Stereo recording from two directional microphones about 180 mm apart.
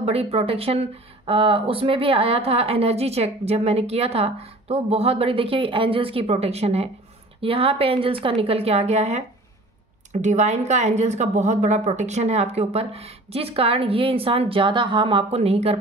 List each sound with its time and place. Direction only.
0.0 s speech: 35° right (ahead or behind)